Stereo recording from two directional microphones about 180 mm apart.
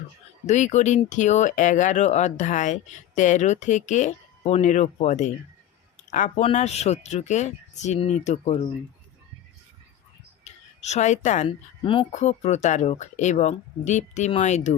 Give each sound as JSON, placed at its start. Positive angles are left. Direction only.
{"t": 0.4, "sound": "speech", "side_deg": 40}
{"t": 10.4, "sound": "a sound", "side_deg": 35}
{"t": 11.4, "sound": "speech", "side_deg": 30}
{"t": 12.2, "sound": "speech", "side_deg": 40}